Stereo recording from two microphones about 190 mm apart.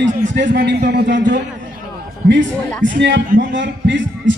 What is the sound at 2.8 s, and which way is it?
A man's voice, 80° right.